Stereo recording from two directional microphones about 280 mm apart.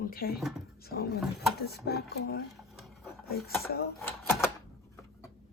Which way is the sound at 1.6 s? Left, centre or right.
Left.